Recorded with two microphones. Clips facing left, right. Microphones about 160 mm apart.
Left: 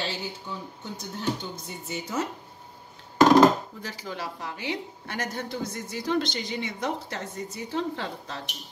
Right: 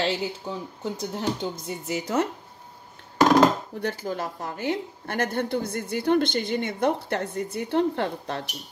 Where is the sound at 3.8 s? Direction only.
55° right (ahead or behind).